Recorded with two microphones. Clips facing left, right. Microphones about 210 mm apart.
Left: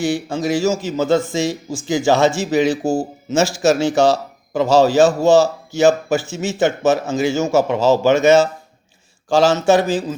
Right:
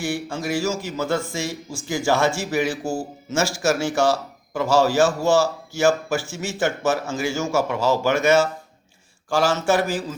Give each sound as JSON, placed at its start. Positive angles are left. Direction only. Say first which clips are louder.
{"t": 0.1, "sound": "a man's voice", "louder": "left 6 dB", "side_deg": 20}